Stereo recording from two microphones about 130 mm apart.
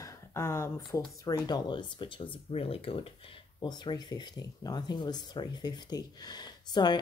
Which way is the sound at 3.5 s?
30° left (ahead or behind).